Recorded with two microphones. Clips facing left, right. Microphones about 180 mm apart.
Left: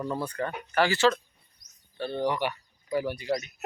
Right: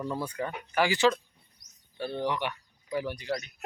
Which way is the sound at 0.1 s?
10° right (ahead or behind).